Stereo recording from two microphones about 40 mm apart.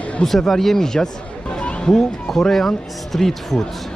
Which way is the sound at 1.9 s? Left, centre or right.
Centre.